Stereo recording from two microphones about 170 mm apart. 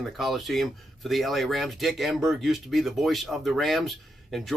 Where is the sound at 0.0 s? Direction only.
Centre (ahead or behind).